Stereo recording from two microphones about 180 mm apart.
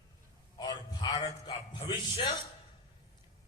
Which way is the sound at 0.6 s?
20° left (ahead or behind).